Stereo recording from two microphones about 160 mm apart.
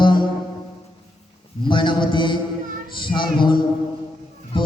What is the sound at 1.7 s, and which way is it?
A man's voice, 30° left (ahead or behind).